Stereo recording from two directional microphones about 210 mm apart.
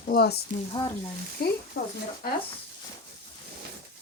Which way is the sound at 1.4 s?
45° left (ahead or behind).